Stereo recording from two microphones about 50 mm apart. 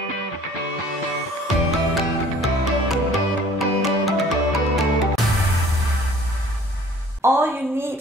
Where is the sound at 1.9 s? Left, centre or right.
Centre.